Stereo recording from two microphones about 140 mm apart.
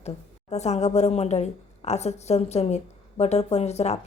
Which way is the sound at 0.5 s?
50° left (ahead or behind).